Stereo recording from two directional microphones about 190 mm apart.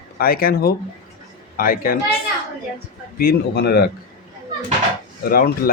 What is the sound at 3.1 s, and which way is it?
Speech, 55° left (ahead or behind).